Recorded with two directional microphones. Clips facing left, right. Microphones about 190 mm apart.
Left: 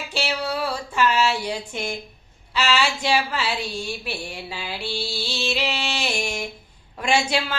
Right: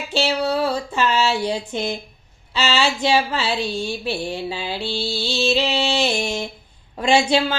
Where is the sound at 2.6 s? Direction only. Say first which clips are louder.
Right 2 dB; 25° right (ahead or behind).